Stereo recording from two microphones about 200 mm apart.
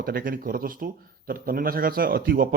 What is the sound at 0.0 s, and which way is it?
A man's voice, 45° right (ahead or behind).